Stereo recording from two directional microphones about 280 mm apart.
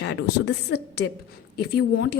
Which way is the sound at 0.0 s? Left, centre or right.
Left.